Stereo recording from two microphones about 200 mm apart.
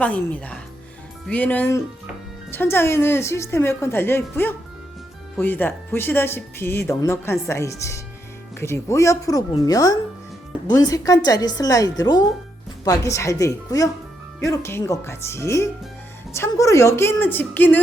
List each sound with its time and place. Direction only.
0.0 s speech: 5° left (ahead or behind)